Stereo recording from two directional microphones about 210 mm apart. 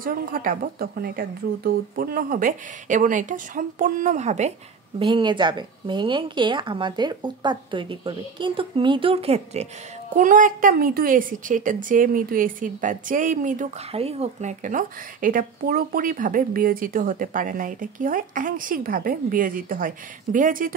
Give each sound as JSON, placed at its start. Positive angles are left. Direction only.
{"t": 0.0, "sound": "a woman's voice", "side_deg": -40}